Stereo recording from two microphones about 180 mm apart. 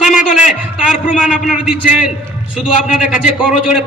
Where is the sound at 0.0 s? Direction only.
5° right (ahead or behind).